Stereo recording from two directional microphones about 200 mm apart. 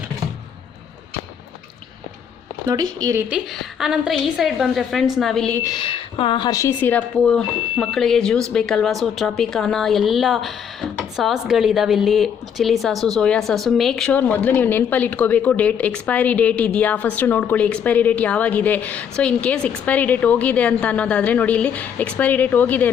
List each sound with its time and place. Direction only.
2.6 s a woman's voice: 20° right (ahead or behind); by 5.6 s 5° left (ahead or behind)
5.6 s a woman's voice: 25° left (ahead or behind); by 22.9 s 10° left (ahead or behind)